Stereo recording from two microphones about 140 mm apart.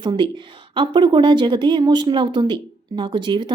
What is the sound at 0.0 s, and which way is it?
A woman's voice, 35° right (ahead or behind).